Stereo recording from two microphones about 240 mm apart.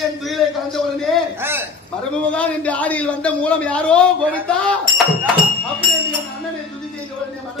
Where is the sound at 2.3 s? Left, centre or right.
Centre.